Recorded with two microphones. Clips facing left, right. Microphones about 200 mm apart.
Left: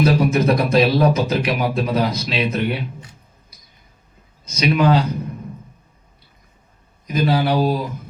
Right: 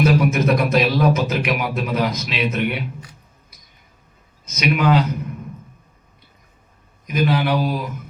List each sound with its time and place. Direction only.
0.0 s speech: 35° left (ahead or behind)
7.1 s speech: 35° left (ahead or behind)